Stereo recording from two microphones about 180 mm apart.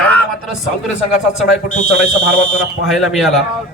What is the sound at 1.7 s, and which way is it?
Speech, 45° left (ahead or behind).